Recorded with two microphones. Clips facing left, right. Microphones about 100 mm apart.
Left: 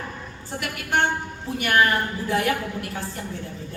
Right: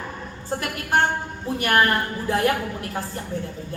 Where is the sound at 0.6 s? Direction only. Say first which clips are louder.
Right 1 dB; 40° right (ahead or behind).